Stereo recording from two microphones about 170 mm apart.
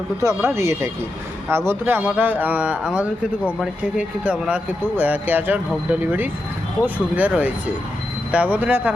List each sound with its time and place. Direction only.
0.2 s speech: 15° right (ahead or behind)